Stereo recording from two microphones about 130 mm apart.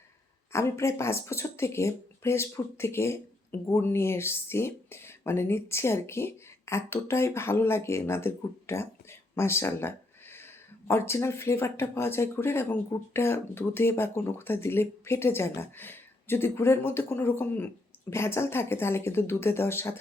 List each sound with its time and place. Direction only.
0.5 s speech: 20° left (ahead or behind)